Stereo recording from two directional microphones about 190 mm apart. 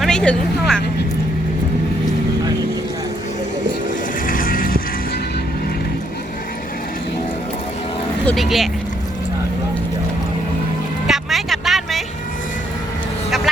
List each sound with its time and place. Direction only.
0.0 s speech: 5° left (ahead or behind)
4.3 s a sound: 45° left (ahead or behind)
8.2 s speech: 5° left (ahead or behind)
11.0 s vehicle: centre (ahead or behind)